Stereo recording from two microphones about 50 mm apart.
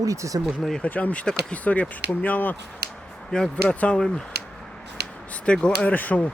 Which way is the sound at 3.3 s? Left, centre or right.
Centre.